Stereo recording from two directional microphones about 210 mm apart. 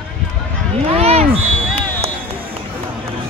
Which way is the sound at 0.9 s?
30° right (ahead or behind).